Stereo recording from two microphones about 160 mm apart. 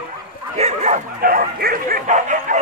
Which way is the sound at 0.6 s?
45° right (ahead or behind).